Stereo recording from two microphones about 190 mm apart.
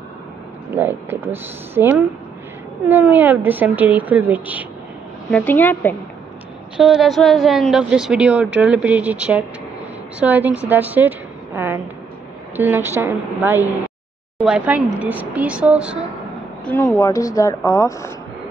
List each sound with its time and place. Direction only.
0.7 s speech: 10° right (ahead or behind)
5.3 s a woman's voice: 10° left (ahead or behind)
6.8 s a woman's voice: centre (ahead or behind)
16.6 s a woman's voice: 10° left (ahead or behind)